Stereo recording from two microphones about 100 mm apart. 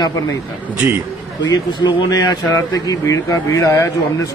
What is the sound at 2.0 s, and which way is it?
A man's voice, 40° left (ahead or behind).